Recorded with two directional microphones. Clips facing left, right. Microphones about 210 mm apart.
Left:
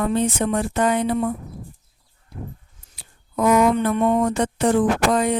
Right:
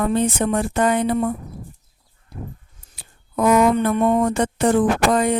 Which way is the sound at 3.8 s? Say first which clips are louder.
Right 1 dB; 45° right (ahead or behind).